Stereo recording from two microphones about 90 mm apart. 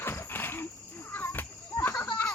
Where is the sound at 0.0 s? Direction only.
25° left (ahead or behind).